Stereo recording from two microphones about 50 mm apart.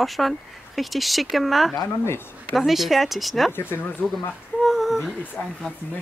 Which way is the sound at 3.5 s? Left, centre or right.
Left.